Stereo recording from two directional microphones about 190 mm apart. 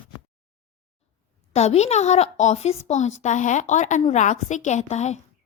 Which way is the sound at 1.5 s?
35° left (ahead or behind).